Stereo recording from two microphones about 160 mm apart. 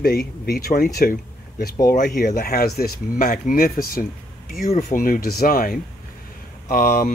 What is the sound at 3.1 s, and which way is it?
Speech, 50° left (ahead or behind).